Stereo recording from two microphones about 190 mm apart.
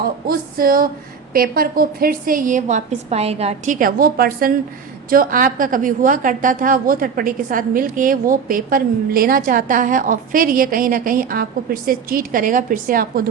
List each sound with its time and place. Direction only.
0.0 s a woman's voice: 50° right (ahead or behind)